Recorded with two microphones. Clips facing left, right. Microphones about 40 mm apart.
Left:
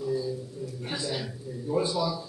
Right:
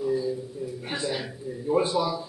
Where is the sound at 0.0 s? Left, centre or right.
Right.